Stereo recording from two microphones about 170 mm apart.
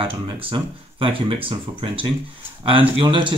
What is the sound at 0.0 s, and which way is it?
Speech, 30° right (ahead or behind).